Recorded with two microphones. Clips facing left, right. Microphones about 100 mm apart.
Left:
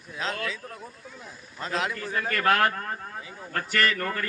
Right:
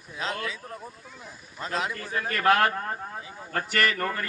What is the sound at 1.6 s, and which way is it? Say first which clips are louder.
Speech: left 1 dB; 5° right (ahead or behind).